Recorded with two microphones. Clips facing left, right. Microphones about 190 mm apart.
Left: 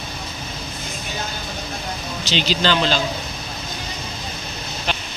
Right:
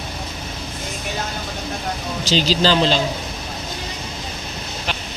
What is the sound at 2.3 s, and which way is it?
Speech, 35° right (ahead or behind).